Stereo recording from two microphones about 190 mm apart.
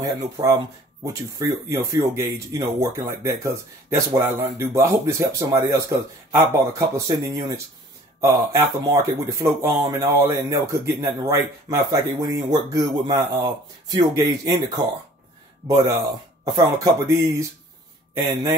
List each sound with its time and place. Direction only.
0.0 s speech: 20° right (ahead or behind)